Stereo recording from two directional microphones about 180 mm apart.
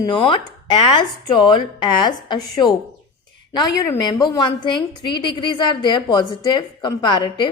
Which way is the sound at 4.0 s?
25° left (ahead or behind).